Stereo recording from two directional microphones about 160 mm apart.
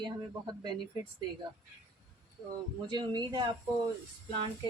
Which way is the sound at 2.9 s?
30° right (ahead or behind).